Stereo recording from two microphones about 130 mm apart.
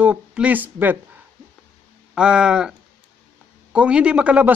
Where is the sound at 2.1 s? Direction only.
5° right (ahead or behind).